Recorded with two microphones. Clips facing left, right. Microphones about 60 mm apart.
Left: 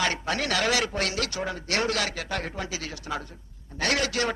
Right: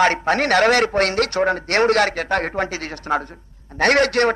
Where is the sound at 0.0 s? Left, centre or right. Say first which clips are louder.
Right 10 dB; right.